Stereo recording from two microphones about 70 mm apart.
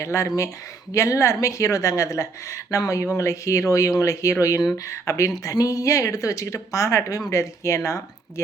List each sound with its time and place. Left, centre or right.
0.0 s a woman's voice: left